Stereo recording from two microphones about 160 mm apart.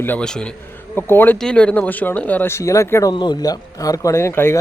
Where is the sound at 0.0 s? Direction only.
10° left (ahead or behind).